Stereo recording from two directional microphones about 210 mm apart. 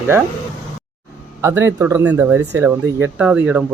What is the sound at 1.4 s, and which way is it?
Speech, 15° right (ahead or behind).